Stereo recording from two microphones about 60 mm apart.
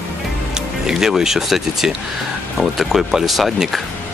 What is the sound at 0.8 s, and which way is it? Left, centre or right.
Speech, centre.